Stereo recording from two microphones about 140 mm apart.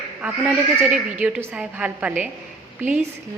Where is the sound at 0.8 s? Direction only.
10° right (ahead or behind).